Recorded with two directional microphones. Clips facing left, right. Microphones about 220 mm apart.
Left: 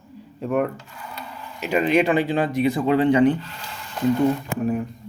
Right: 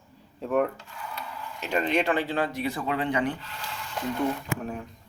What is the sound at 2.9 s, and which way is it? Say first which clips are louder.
Speech: left 11 dB; 30° left (ahead or behind).